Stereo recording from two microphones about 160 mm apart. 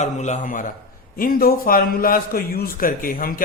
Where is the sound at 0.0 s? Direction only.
45° left (ahead or behind).